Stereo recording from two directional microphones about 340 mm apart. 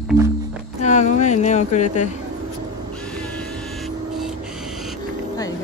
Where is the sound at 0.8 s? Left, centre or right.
Left.